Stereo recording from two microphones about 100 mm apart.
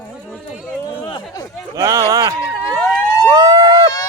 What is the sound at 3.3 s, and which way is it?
Vehicle, 40° right (ahead or behind).